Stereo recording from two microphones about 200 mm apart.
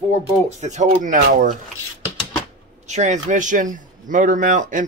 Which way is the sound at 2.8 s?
35° right (ahead or behind).